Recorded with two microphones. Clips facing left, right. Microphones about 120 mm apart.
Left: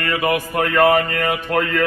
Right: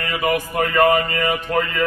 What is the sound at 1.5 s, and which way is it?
Speech, 55° left (ahead or behind).